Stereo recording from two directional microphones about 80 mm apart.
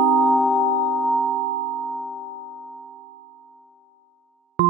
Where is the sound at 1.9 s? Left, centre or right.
Centre.